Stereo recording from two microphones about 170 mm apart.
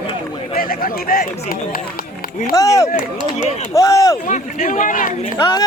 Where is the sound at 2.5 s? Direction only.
20° left (ahead or behind).